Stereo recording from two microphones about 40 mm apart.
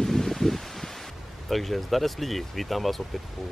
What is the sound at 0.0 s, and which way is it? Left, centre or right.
Rustling leaves, centre.